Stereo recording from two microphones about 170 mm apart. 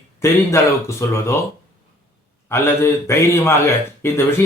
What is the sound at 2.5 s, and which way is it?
Speech, 15° left (ahead or behind).